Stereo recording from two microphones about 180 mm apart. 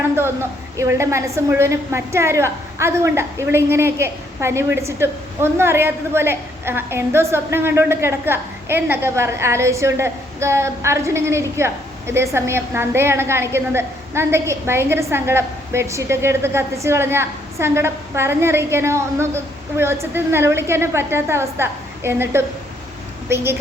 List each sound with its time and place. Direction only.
0.8 s a woman's voice: 15° right (ahead or behind)